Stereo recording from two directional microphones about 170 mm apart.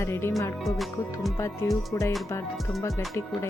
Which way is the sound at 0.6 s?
Centre (ahead or behind).